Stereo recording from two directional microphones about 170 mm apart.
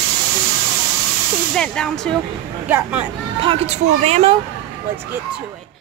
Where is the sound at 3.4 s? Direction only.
35° right (ahead or behind).